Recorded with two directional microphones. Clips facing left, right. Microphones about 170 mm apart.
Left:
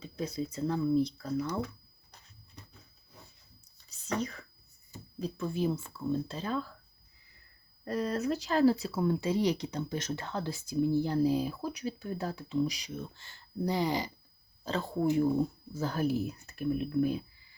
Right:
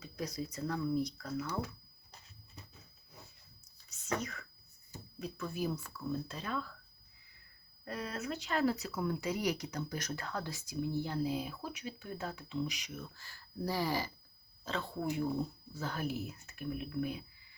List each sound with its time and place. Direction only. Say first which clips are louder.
0.0 s speech: left 5 dB; 25° left (ahead or behind)
3.6 s whispering: left 1 dB; 30° left (ahead or behind)
5.2 s speech: left 6 dB; 30° left (ahead or behind)
7.9 s speech: left 9 dB; 40° left (ahead or behind); by 14.1 s 20° left (ahead or behind)
14.6 s speech: left 7 dB; 35° left (ahead or behind)